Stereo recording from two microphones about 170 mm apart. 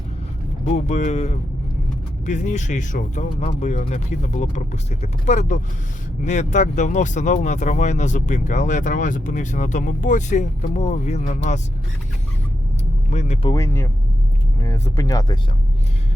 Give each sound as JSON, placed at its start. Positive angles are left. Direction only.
{"t": 0.7, "sound": "speech", "side_deg": 45}
{"t": 13.1, "sound": "speech", "side_deg": 40}
{"t": 13.5, "sound": "speech", "side_deg": 15}